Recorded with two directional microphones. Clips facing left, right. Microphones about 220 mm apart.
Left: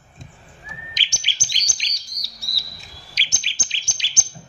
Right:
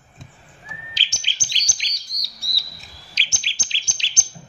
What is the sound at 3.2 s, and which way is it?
Bird, 20° left (ahead or behind).